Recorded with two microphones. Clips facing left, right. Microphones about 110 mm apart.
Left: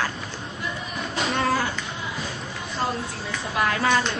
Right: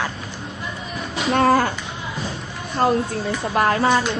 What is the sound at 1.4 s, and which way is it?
Speech, 50° right (ahead or behind).